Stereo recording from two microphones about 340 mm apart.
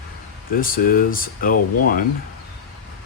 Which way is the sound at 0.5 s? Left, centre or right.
Left.